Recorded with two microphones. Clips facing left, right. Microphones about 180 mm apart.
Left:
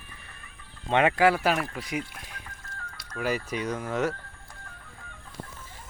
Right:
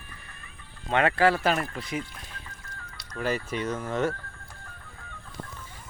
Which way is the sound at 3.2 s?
10° left (ahead or behind).